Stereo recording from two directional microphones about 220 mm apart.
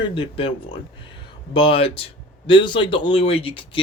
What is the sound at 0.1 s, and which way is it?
Speech, 25° left (ahead or behind).